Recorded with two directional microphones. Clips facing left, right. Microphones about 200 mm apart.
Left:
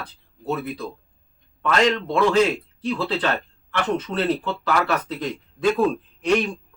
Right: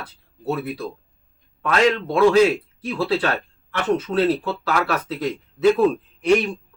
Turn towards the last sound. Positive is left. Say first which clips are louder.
# right 3 dB
turn(degrees=-10)  # may be behind; listen again after turning